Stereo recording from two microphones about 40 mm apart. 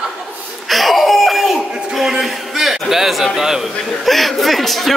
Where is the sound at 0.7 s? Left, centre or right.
Centre.